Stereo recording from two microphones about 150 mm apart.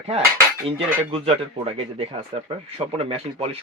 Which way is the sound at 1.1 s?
40° right (ahead or behind).